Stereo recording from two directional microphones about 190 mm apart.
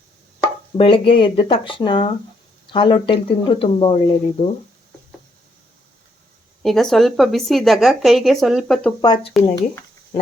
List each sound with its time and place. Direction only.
0.8 s speech: 30° left (ahead or behind)
6.6 s speech: centre (ahead or behind)
9.0 s speech: 20° left (ahead or behind)